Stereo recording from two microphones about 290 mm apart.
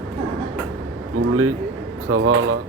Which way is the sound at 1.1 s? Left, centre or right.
Right.